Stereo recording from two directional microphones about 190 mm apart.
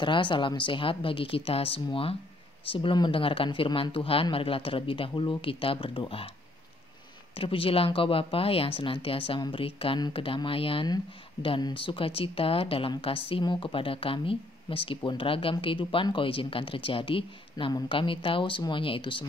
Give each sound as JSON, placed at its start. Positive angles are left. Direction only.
{"t": 0.0, "sound": "a woman's voice", "side_deg": 25}
{"t": 7.3, "sound": "a woman's voice", "side_deg": 30}